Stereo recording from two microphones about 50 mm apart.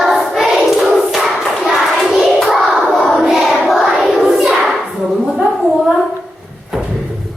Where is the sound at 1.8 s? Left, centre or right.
Centre.